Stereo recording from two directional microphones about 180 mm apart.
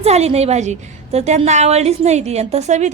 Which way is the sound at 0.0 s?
35° right (ahead or behind).